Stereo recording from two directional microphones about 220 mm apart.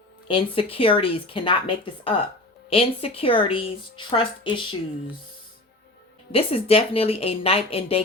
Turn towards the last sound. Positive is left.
turn(degrees=25)  # may be behind; listen again after turning